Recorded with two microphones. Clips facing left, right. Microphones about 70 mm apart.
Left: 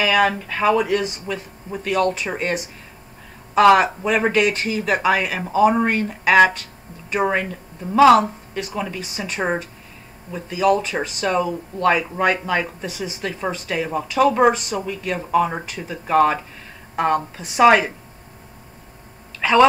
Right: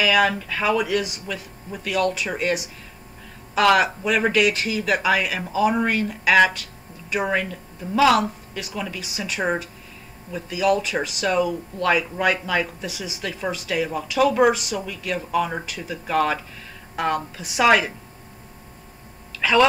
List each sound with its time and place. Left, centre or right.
0.0 s speech: left
1.2 s speech: left
3.5 s speech: left
8.7 s speech: left
10.5 s speech: left
12.8 s speech: left
13.2 s speech: left
14.8 s speech: left
15.9 s a woman's voice: left
17.4 s speech: left
19.4 s speech: left